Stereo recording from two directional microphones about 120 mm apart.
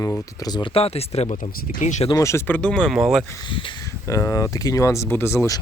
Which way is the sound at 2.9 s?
5° right (ahead or behind).